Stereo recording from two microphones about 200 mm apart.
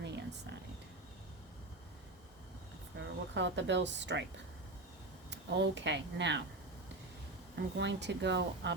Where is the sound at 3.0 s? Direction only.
65° right (ahead or behind).